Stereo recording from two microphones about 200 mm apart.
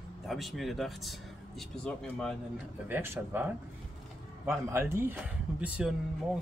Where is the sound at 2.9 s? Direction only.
10° right (ahead or behind).